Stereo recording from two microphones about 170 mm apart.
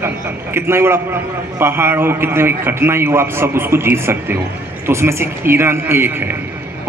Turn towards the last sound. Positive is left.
turn(degrees=-10)  # may be behind; listen again after turning